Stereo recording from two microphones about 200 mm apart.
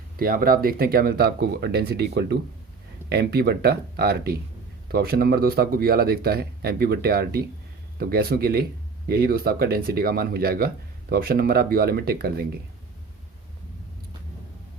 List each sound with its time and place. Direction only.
0.2 s speech: 50° right (ahead or behind)